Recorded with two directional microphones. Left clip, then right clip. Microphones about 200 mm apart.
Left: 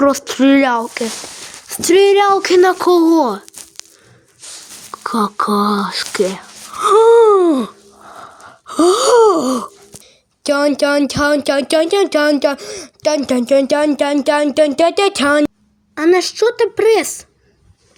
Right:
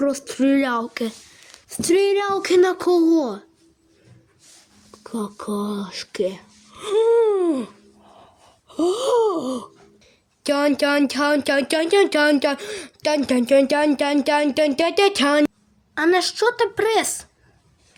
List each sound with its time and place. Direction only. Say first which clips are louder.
0.0 s speech: left 8 dB; 5° left (ahead or behind)
0.7 s speech: left 7 dB; 15° right (ahead or behind)
1.6 s speech: left 8 dB; 5° left (ahead or behind)
4.9 s speech: left 13 dB; 10° left (ahead or behind)
6.8 s gasp: left 9 dB; 50° left (ahead or behind)
9.0 s gasp: left 9 dB; 50° left (ahead or behind)
9.3 s speech: left 10 dB; 20° left (ahead or behind)